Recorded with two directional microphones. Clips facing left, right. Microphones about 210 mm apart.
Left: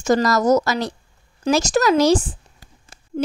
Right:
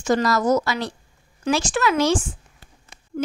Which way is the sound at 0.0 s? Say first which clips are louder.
Left 3 dB; 40° left (ahead or behind).